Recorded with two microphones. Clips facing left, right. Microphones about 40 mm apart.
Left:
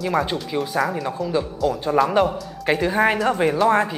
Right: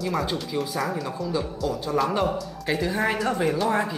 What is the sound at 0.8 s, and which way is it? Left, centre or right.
Speech, centre.